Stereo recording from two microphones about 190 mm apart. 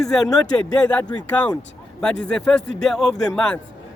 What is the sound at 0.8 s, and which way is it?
Speech, 5° left (ahead or behind).